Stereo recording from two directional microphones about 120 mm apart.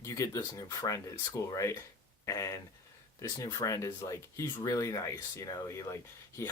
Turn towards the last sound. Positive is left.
turn(degrees=25)  # may be behind; listen again after turning